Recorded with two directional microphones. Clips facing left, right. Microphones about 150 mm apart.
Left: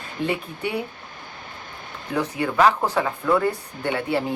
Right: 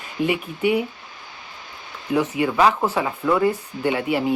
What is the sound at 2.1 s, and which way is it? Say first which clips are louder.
Speech: right 4 dB; 15° right (ahead or behind).